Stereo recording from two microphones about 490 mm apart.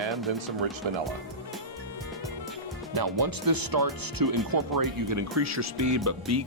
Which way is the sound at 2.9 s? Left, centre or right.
Right.